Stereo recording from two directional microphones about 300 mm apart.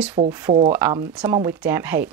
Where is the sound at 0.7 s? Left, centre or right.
Centre.